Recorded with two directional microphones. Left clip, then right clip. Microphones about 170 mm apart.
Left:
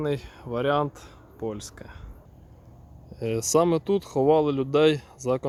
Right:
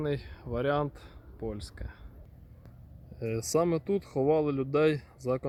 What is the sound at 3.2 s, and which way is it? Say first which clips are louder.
Speech: left 6 dB; 10° left (ahead or behind).